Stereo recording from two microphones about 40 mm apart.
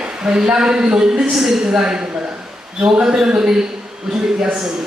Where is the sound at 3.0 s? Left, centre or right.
Centre.